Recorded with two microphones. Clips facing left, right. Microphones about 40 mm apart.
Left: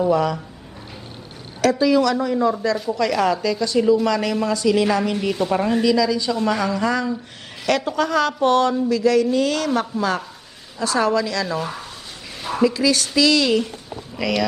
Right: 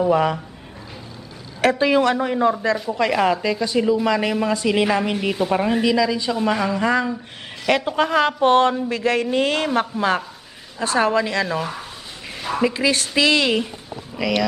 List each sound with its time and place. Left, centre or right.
0.1 s speech: right
1.6 s a woman's voice: right
5.1 s a woman's voice: centre
6.7 s a woman's voice: right
9.9 s speech: centre
10.8 s speech: right
11.6 s speech: centre
12.5 s speech: right
14.2 s speech: centre